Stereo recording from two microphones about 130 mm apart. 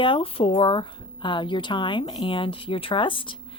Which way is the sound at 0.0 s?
45° left (ahead or behind).